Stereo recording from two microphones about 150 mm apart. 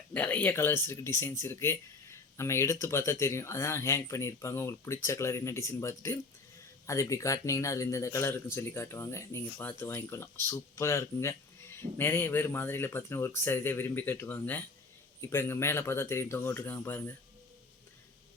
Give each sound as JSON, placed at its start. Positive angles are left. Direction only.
{"t": 0.1, "sound": "speech", "side_deg": 10}